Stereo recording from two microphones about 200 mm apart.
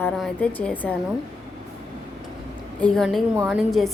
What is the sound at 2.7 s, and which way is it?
A woman's voice, 5° left (ahead or behind).